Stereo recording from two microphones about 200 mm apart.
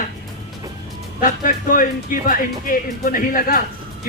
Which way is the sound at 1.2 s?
45° left (ahead or behind).